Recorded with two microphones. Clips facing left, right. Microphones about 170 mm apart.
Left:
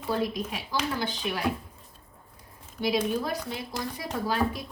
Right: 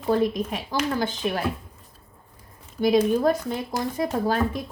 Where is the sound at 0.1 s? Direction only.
50° right (ahead or behind).